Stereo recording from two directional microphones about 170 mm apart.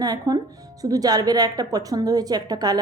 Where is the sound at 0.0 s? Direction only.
20° right (ahead or behind).